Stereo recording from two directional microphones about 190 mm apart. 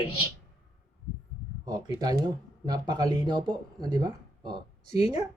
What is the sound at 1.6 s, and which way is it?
Speech, 20° right (ahead or behind).